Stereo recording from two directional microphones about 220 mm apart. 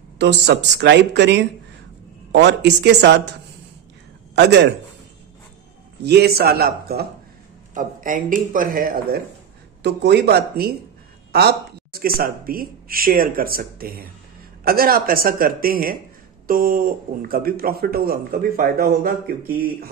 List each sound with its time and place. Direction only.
0.2 s a man's voice: 50° right (ahead or behind)
4.4 s a man's voice: 50° right (ahead or behind)
6.0 s a man's voice: 45° right (ahead or behind)